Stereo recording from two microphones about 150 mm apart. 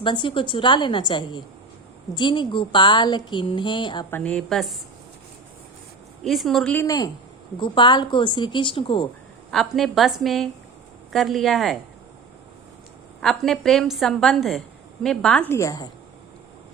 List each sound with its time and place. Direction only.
0.0 s a woman's voice: 35° left (ahead or behind)
4.1 s a woman's voice: 10° left (ahead or behind)
6.2 s a woman's voice: centre (ahead or behind)
6.7 s a woman's voice: 25° left (ahead or behind)
9.5 s a woman's voice: centre (ahead or behind)
13.2 s a woman's voice: centre (ahead or behind)
15.4 s a woman's voice: 20° left (ahead or behind)